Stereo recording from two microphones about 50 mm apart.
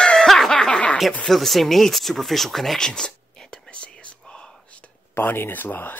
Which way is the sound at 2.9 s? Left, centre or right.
Centre.